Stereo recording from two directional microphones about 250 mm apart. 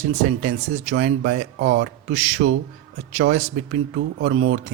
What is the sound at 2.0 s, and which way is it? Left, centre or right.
Speech, right.